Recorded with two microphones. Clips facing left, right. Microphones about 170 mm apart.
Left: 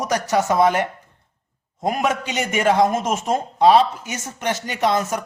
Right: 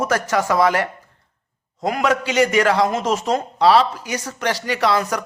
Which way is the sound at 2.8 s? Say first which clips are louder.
Even; 50° left (ahead or behind).